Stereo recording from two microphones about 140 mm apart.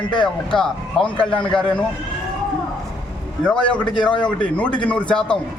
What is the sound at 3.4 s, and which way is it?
Speech, 10° left (ahead or behind).